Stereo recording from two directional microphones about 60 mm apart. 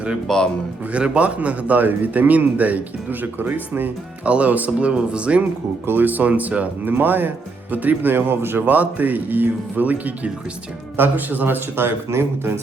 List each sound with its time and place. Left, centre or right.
0.3 s a man's voice: centre
0.9 s a man's voice: centre
5.8 s a man's voice: right
8.6 s a man's voice: right